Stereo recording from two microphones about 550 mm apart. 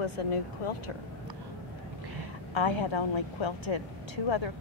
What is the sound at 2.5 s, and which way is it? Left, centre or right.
A woman's voice, left.